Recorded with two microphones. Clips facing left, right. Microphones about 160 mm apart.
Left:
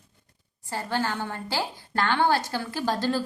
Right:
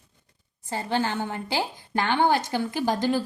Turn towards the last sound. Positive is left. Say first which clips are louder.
# right 2 dB
turn(degrees=-15)  # may be behind; listen again after turning